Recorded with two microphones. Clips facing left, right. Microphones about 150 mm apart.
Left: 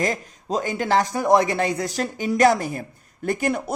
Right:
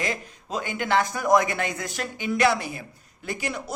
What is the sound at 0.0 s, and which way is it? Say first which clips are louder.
A man's voice: left 5 dB; 40° left (ahead or behind).